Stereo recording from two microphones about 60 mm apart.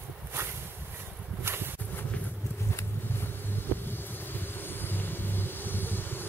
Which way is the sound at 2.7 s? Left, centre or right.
Left.